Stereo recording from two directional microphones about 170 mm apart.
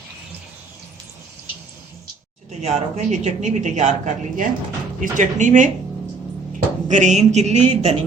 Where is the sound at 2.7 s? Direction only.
45° right (ahead or behind).